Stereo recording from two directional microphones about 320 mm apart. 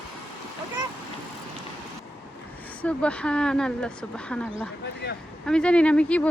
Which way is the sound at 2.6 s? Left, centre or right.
Centre.